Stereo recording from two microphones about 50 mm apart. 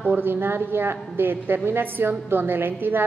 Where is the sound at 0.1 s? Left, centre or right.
Right.